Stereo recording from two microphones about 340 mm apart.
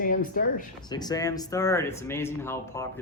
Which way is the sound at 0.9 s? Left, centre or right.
Centre.